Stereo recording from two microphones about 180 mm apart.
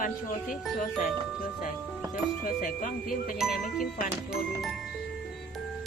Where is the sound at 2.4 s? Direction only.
50° left (ahead or behind).